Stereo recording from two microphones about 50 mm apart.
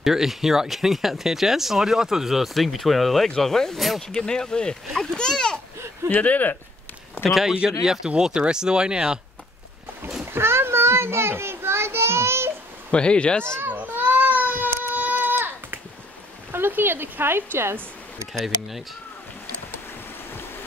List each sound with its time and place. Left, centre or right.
0.0 s speech: centre
6.0 s speech: left
7.2 s speech: centre
10.2 s children playing: right
12.9 s speech: left
13.7 s baby cry: right
15.3 s a sound: right
16.5 s a woman's voice: right